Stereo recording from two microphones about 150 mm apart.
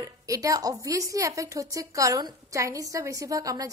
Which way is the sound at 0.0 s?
20° right (ahead or behind).